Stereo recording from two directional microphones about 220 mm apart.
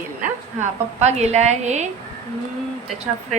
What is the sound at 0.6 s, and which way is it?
A woman's voice, 30° right (ahead or behind).